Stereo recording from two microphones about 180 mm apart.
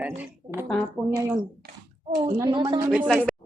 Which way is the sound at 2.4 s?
25° right (ahead or behind).